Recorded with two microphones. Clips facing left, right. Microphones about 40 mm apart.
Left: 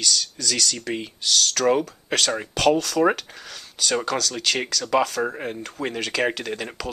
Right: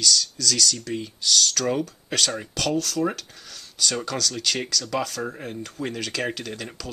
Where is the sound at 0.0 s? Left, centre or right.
Left.